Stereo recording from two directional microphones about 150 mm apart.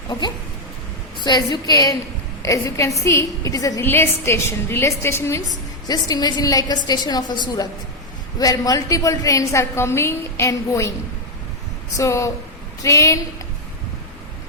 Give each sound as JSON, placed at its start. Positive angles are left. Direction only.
{"t": 0.1, "sound": "a woman's voice", "side_deg": 30}
{"t": 11.9, "sound": "a woman's voice", "side_deg": 20}